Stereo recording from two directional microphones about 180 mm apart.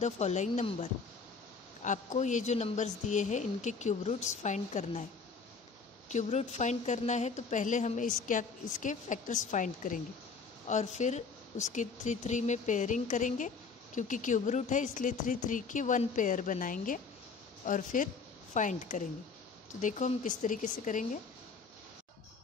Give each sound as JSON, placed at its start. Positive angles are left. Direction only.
{"t": 0.0, "sound": "a woman's voice", "side_deg": 40}
{"t": 6.0, "sound": "a woman's voice", "side_deg": 40}